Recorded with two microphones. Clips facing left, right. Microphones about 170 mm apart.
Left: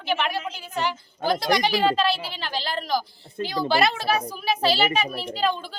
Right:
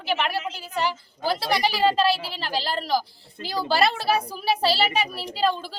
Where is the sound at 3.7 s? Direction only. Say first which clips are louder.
Right 1 dB; 30° right (ahead or behind).